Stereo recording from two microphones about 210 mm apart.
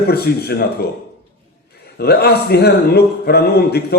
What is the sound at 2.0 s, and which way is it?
A man's voice, 50° left (ahead or behind).